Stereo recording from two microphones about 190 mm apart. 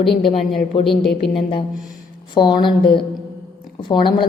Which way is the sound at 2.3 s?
25° left (ahead or behind).